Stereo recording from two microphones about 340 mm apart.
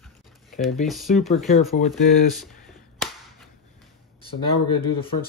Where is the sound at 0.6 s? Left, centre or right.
Centre.